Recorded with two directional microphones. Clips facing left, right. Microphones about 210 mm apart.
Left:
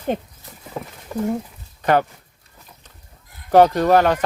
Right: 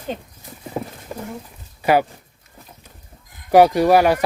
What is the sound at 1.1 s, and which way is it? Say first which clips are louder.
Speech: left 8 dB; 30° right (ahead or behind).